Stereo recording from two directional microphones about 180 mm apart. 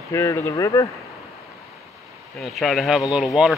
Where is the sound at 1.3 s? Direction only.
Centre (ahead or behind).